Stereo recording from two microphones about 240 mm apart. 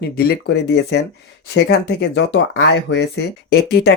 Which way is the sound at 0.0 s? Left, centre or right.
Left.